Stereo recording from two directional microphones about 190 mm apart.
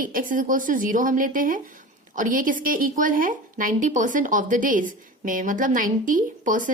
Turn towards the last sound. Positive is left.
turn(degrees=-45)  # may be behind; listen again after turning